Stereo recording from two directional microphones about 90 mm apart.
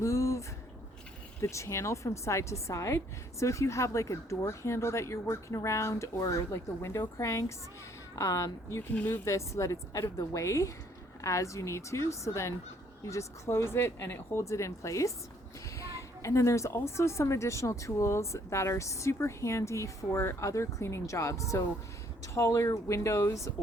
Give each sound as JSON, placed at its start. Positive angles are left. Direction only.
{"t": 0.0, "sound": "a sound", "side_deg": 35}
{"t": 1.4, "sound": "a woman's voice", "side_deg": 35}
{"t": 9.0, "sound": "speech", "side_deg": 20}
{"t": 9.2, "sound": "a woman's voice", "side_deg": 35}